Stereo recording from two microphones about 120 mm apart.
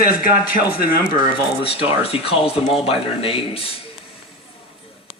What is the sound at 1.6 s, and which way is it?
Speech, 50° left (ahead or behind).